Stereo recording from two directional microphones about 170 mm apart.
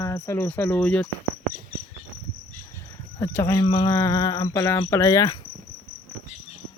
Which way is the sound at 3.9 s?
15° left (ahead or behind).